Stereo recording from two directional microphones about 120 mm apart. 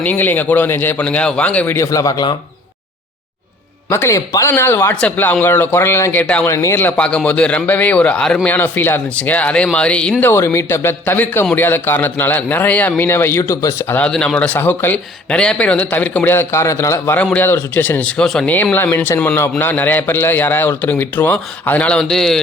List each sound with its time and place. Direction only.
0.0 s speech: 15° left (ahead or behind); by 2.3 s 30° left (ahead or behind)
3.8 s a man's voice: 20° left (ahead or behind)
6.5 s speech: 25° left (ahead or behind)
13.9 s a man's voice: 10° left (ahead or behind)